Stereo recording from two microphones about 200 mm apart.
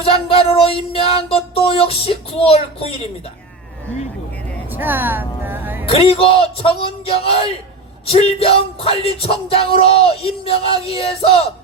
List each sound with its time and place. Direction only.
0.0 s speech: 30° left (ahead or behind)
4.7 s music: 10° right (ahead or behind)
5.9 s speech: 30° left (ahead or behind)